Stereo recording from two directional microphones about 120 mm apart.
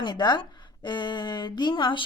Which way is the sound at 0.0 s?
40° left (ahead or behind).